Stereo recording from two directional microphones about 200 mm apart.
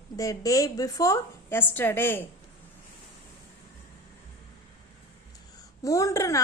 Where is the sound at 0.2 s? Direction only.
15° left (ahead or behind).